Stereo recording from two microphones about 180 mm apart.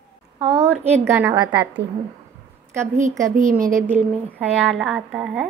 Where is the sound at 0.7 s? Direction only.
10° right (ahead or behind).